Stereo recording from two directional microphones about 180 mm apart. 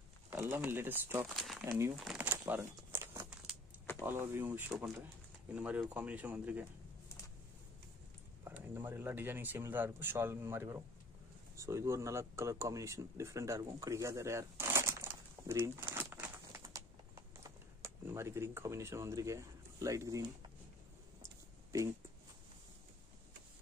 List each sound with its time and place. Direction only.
0.3 s speech: 15° right (ahead or behind)
1.2 s speech: centre (ahead or behind)
1.7 s speech: 15° right (ahead or behind)
2.0 s crumpling: 5° right (ahead or behind)
4.0 s speech: 10° right (ahead or behind)
8.5 s speech: 10° right (ahead or behind)
11.5 s a sound: 15° right (ahead or behind)